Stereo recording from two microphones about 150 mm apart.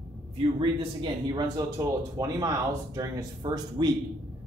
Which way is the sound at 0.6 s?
30° right (ahead or behind).